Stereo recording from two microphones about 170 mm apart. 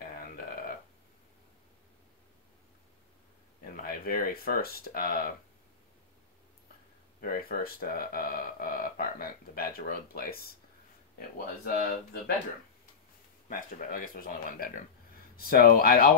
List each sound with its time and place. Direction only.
0.0 s a sound: 60° left (ahead or behind)
3.6 s speech: 60° left (ahead or behind)
7.2 s speech: 60° left (ahead or behind)
13.5 s speech: 55° left (ahead or behind)